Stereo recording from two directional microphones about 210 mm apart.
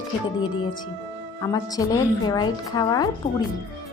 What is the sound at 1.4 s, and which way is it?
A woman's voice, 15° left (ahead or behind).